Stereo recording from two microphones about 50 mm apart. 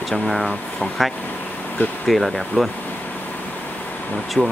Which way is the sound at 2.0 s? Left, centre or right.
Centre.